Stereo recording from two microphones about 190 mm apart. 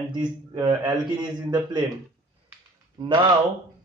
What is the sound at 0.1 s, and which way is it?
A man's voice, 20° right (ahead or behind).